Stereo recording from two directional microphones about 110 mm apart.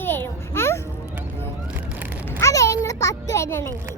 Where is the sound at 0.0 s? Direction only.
20° left (ahead or behind).